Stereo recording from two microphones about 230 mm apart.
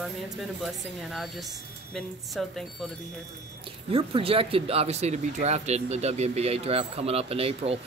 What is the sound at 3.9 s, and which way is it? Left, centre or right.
Speech, right.